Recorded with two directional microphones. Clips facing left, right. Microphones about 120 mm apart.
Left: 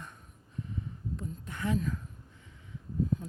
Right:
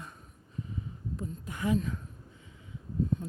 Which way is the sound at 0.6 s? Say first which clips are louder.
Even; 5° right (ahead or behind).